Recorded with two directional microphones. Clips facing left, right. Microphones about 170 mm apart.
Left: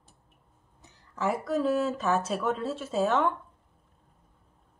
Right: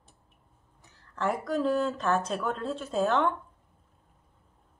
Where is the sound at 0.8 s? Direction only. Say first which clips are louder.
Left 3 dB; 15° left (ahead or behind).